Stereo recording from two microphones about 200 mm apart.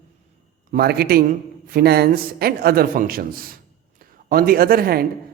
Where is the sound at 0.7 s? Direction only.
50° right (ahead or behind).